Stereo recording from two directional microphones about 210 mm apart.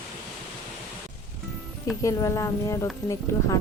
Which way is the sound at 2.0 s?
15° left (ahead or behind).